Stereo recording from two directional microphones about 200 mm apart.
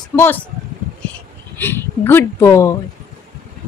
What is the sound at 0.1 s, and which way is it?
Speech, 10° left (ahead or behind).